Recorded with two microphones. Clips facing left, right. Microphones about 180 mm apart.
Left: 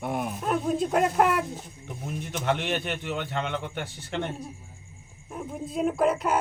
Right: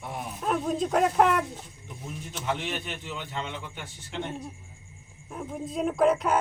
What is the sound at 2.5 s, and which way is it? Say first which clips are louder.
A man's voice: left 4 dB; 70° left (ahead or behind).